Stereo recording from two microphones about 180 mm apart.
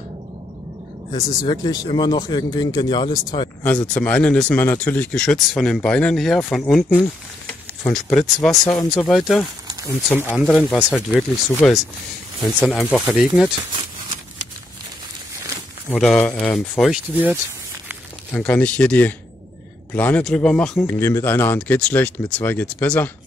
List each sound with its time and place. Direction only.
1.5 s speech: 20° left (ahead or behind)
3.6 s speech: 5° left (ahead or behind)
10.0 s speech: 10° left (ahead or behind)
10.3 s speech: centre (ahead or behind)
15.9 s speech: 5° left (ahead or behind)
17.1 s speech: 10° right (ahead or behind)
18.3 s speech: 5° left (ahead or behind)